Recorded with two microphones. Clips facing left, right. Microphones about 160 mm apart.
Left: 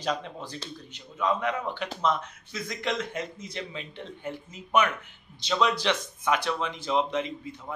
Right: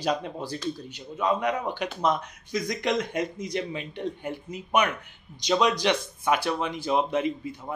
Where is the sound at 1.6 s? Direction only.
15° right (ahead or behind).